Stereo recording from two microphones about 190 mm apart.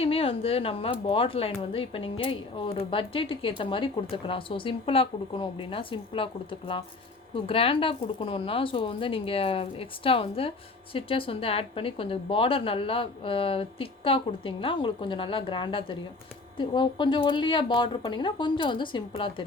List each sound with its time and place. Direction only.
0.0 s a woman's voice: 30° left (ahead or behind)